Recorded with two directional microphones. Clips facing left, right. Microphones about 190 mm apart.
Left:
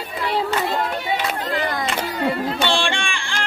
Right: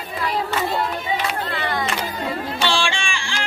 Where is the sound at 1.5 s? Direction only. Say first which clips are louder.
Left 1 dB; 40° left (ahead or behind).